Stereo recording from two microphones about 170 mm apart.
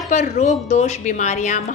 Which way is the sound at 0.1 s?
45° left (ahead or behind).